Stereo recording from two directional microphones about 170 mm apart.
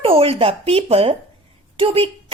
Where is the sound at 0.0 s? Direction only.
35° right (ahead or behind).